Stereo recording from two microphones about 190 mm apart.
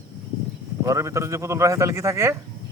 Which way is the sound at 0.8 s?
15° right (ahead or behind).